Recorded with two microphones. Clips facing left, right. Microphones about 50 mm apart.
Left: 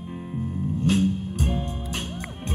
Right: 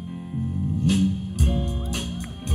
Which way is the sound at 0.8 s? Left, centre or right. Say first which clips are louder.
Even; left.